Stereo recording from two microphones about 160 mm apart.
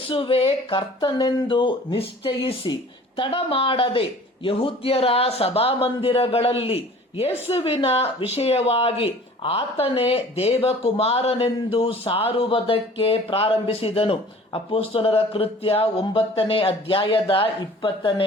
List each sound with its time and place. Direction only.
0.1 s a man's voice: 35° left (ahead or behind)